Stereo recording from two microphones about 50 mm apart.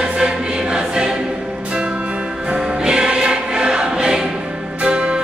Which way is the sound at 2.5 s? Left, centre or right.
Centre.